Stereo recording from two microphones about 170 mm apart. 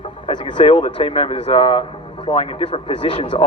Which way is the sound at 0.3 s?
25° left (ahead or behind).